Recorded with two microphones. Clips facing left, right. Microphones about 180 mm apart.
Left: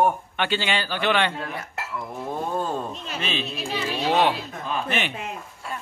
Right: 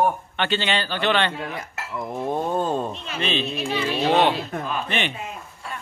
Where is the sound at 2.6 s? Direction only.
25° right (ahead or behind).